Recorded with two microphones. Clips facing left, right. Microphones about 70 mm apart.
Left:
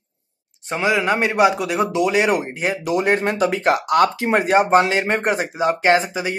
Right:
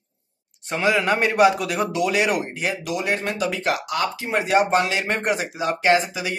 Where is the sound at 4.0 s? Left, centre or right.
Left.